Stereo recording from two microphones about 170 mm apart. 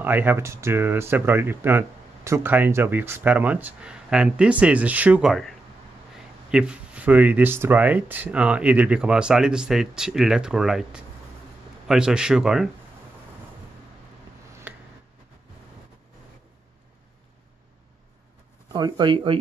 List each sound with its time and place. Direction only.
0.0 s a man's voice: 10° right (ahead or behind)
14.7 s a sound: 10° right (ahead or behind)
18.7 s speech: 25° right (ahead or behind)